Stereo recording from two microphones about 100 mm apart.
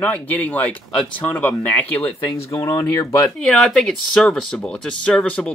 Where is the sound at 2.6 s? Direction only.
30° left (ahead or behind).